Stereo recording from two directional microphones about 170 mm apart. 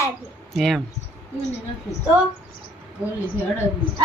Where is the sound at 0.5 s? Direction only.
Centre (ahead or behind).